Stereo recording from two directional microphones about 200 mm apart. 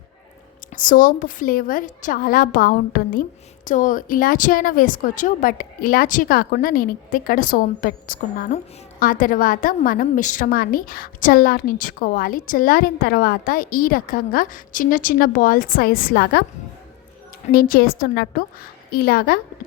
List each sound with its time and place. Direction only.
0.7 s a woman's voice: 40° left (ahead or behind)
17.5 s a woman's voice: 45° left (ahead or behind)